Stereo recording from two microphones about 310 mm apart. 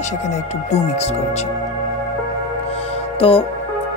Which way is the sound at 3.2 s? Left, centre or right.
Centre.